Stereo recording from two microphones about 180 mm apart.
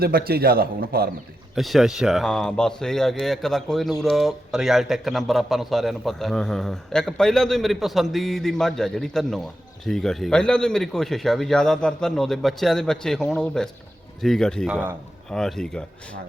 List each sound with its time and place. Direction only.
0.0 s a man's voice: 60° right (ahead or behind)
1.5 s a man's voice: centre (ahead or behind)
14.7 s a man's voice: 10° right (ahead or behind)
15.3 s a man's voice: 5° left (ahead or behind)